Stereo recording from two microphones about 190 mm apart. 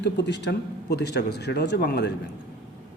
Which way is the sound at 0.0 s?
65° left (ahead or behind).